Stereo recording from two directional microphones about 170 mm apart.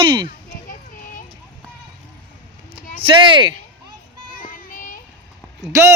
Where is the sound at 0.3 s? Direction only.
50° left (ahead or behind).